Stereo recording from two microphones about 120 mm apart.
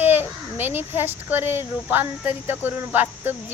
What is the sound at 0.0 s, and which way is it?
A child's voice, 15° right (ahead or behind).